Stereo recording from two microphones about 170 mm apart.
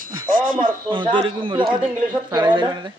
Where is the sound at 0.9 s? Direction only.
30° right (ahead or behind).